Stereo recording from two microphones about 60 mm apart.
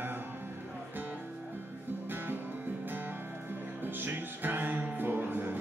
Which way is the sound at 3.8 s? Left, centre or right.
Right.